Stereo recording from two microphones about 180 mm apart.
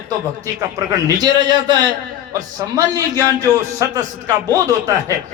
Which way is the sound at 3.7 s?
20° right (ahead or behind).